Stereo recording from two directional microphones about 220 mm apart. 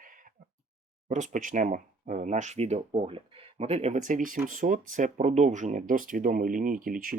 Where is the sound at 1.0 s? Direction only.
35° right (ahead or behind).